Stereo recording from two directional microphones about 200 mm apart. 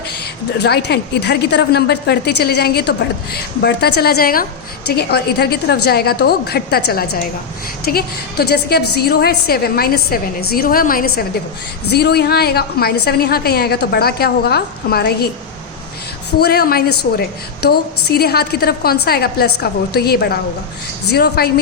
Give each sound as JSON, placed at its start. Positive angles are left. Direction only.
{"t": 0.6, "sound": "a woman's voice", "side_deg": 55}
{"t": 16.4, "sound": "a woman's voice", "side_deg": 50}